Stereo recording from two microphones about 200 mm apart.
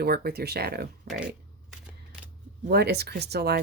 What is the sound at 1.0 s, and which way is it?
Speech, centre (ahead or behind).